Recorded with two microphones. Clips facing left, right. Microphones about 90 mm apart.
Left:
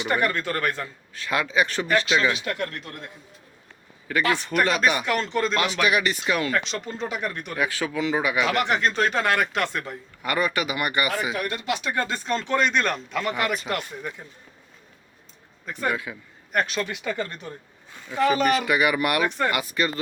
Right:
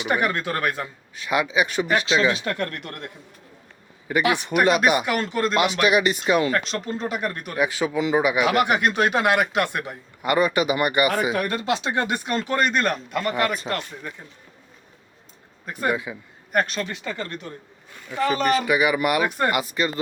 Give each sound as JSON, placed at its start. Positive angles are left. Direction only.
{"t": 0.0, "sound": "speech", "side_deg": -10}
{"t": 2.3, "sound": "speech", "side_deg": -40}
{"t": 4.1, "sound": "speech", "side_deg": -15}
{"t": 5.0, "sound": "speech", "side_deg": -5}
{"t": 5.5, "sound": "speech", "side_deg": -20}
{"t": 6.5, "sound": "speech", "side_deg": 0}
{"t": 7.6, "sound": "speech", "side_deg": -20}
{"t": 11.3, "sound": "speech", "side_deg": -40}
{"t": 13.7, "sound": "speech", "side_deg": 10}
{"t": 15.6, "sound": "a man's voice", "side_deg": -5}